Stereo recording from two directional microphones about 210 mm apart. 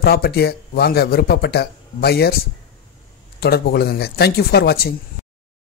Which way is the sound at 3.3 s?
50° left (ahead or behind).